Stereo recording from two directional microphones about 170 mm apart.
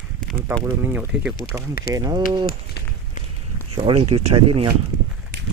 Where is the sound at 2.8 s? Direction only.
70° left (ahead or behind).